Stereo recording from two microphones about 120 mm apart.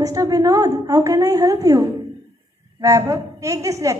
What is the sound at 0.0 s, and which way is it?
A woman's voice, 30° right (ahead or behind).